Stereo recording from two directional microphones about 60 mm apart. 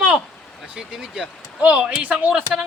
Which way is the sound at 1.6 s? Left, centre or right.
Right.